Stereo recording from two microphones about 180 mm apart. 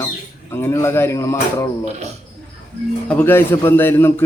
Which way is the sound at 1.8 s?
40° right (ahead or behind).